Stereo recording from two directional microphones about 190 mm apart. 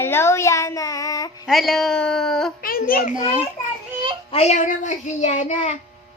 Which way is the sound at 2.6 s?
50° left (ahead or behind).